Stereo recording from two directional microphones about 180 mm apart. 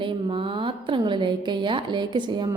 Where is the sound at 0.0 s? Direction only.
30° right (ahead or behind).